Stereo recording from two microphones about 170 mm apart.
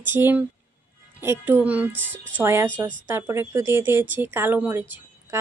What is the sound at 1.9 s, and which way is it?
Speech, 90° right.